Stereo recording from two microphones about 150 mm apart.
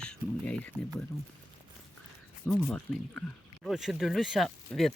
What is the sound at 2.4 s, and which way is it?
Speech, 5° left (ahead or behind).